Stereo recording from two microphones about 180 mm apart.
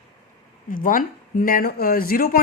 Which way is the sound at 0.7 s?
50° left (ahead or behind).